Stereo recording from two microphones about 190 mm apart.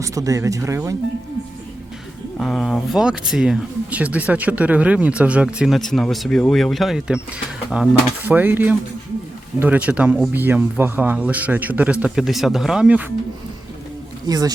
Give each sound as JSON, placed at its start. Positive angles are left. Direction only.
{"t": 0.0, "sound": "speech", "side_deg": -15}
{"t": 2.4, "sound": "speech", "side_deg": 0}
{"t": 14.3, "sound": "speech", "side_deg": -20}